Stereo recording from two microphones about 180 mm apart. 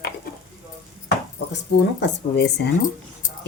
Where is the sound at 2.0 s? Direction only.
70° left (ahead or behind).